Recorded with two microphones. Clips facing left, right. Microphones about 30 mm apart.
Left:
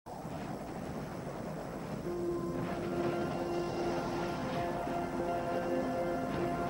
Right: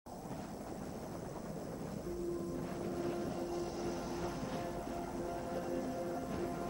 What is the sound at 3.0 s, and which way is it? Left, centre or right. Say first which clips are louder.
Music: left 5 dB; left.